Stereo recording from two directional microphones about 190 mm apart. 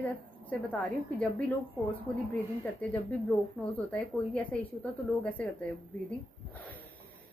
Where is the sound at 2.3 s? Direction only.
5° left (ahead or behind).